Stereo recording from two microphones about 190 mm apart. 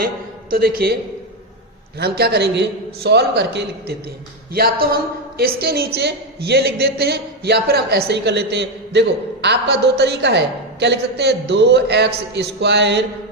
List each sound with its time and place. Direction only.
0.5 s speech: 50° right (ahead or behind)
2.0 s a woman's voice: 60° right (ahead or behind)
4.5 s a woman's voice: 50° right (ahead or behind)